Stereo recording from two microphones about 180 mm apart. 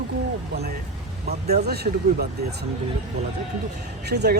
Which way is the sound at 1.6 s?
60° right (ahead or behind).